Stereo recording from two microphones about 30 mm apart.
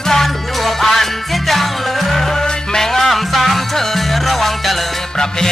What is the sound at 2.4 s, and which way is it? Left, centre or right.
Music, left.